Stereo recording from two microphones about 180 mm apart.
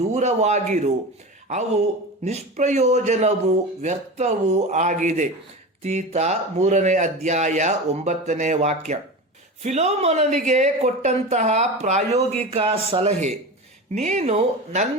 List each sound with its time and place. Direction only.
0.1 s a woman's voice: 40° right (ahead or behind)
2.2 s a woman's voice: 40° right (ahead or behind)